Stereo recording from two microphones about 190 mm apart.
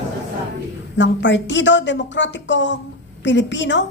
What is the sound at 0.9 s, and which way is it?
A woman's voice, 70° left (ahead or behind).